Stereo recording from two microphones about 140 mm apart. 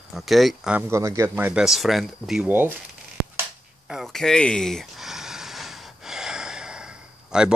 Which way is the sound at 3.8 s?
Centre (ahead or behind).